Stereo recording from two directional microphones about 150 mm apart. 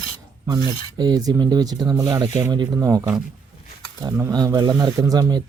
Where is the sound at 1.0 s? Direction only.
25° right (ahead or behind).